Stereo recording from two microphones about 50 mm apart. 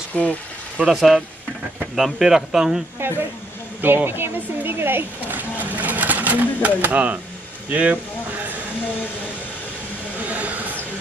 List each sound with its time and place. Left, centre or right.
0.1 s speech: left
0.8 s speech: centre
3.8 s speech: right
5.6 s sewing machine: right
7.7 s speech: right
10.2 s a sound: right